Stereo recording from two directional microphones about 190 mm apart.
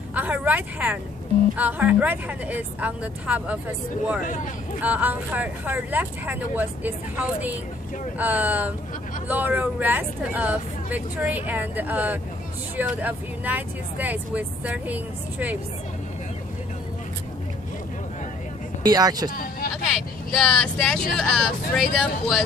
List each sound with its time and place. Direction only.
0.1 s vehicle: 10° right (ahead or behind)
1.6 s speech: 10° right (ahead or behind)
18.8 s speech: 20° right (ahead or behind)
19.3 s a sound: 50° left (ahead or behind)
19.7 s speech: centre (ahead or behind)